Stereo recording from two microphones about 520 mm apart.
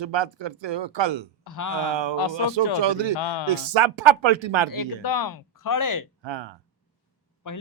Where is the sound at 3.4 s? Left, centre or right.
Right.